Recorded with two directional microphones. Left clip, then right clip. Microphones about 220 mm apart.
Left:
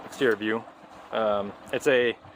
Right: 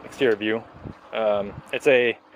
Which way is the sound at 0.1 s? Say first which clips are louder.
Right 3 dB; 10° right (ahead or behind).